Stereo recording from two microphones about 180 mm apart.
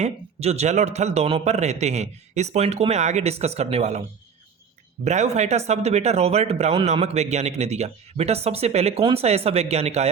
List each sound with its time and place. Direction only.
0.0 s speech: 35° right (ahead or behind)
5.0 s speech: 40° right (ahead or behind)